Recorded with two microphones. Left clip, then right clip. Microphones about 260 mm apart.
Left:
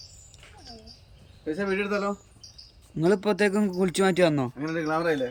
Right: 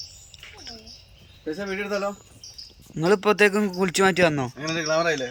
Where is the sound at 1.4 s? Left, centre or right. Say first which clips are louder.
Left 1 dB; right.